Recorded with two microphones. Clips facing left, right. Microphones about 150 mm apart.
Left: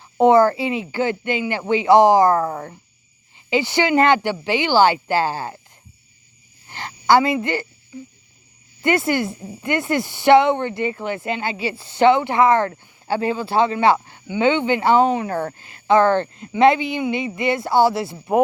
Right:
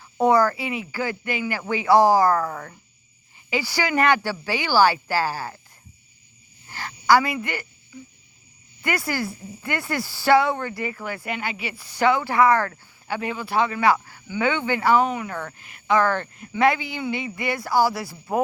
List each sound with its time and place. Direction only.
0.0 s speech: 25° left (ahead or behind)
6.7 s a woman's voice: 25° left (ahead or behind)
8.8 s speech: 25° left (ahead or behind)